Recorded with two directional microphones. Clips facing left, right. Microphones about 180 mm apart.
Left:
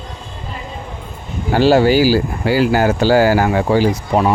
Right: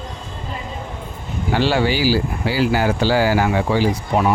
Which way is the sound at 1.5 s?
40° left (ahead or behind).